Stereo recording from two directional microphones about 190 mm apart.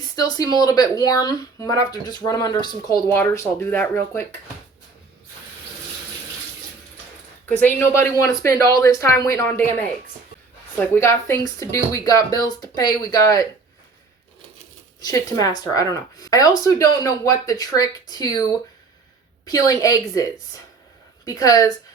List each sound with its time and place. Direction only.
0.2 s speech: 20° left (ahead or behind)
7.4 s speech: 10° left (ahead or behind)
10.8 s speech: 15° left (ahead or behind)
15.0 s speech: 20° left (ahead or behind)
19.5 s speech: 20° left (ahead or behind)
21.2 s speech: 15° left (ahead or behind)